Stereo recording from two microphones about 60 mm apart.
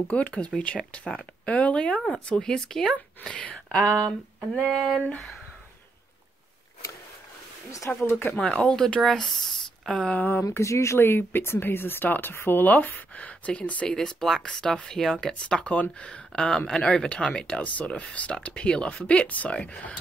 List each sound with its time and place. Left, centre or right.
0.1 s speech: left
4.6 s a sound: centre
8.0 s speech: left
8.4 s speech: centre
9.9 s speech: left
10.5 s speech: left
11.0 s speech: left
13.8 s speech: centre
15.4 s speech: centre